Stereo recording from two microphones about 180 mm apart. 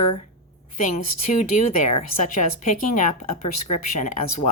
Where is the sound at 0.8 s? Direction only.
45° left (ahead or behind).